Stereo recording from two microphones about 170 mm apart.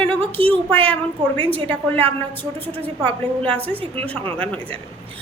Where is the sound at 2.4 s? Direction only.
10° left (ahead or behind).